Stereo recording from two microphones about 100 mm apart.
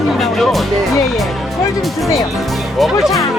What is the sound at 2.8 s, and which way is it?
Speech, centre (ahead or behind).